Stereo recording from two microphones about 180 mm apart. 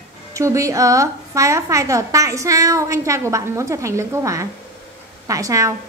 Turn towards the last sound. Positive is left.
turn(degrees=-20)  # may be behind; listen again after turning